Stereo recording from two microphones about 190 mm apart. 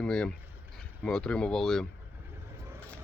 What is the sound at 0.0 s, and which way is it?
Speech, 5° left (ahead or behind).